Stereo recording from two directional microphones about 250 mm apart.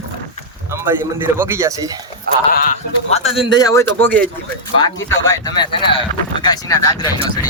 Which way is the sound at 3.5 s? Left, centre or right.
Centre.